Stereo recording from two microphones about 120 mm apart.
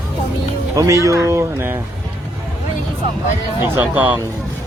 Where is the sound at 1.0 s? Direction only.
25° right (ahead or behind).